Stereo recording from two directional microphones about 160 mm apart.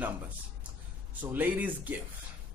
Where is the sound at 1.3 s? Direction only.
10° right (ahead or behind).